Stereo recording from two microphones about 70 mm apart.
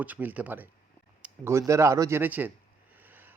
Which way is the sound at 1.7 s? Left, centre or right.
Right.